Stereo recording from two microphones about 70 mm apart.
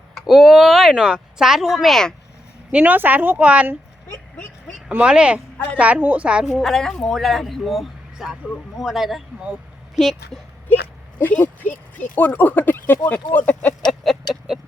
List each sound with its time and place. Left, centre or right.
0.3 s speech: centre
2.7 s a woman's voice: right
4.9 s a woman's voice: centre
6.6 s speech: centre
11.2 s speech: left
13.8 s a sound: centre